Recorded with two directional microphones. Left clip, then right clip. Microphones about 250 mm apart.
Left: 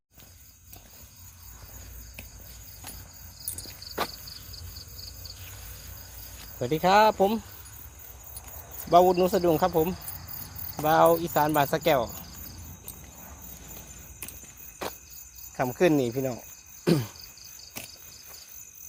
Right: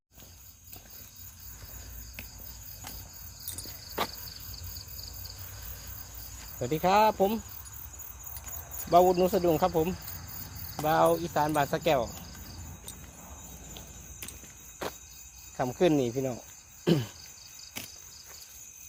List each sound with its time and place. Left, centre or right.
6.6 s speech: left
8.9 s speech: centre
14.8 s cricket: centre
15.5 s speech: centre
16.8 s a sound: centre